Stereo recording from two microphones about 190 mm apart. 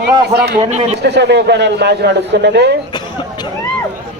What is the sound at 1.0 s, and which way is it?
A man's voice, 60° right (ahead or behind).